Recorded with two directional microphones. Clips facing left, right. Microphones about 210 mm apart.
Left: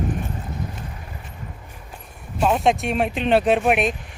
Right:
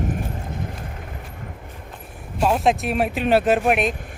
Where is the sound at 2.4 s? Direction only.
5° right (ahead or behind).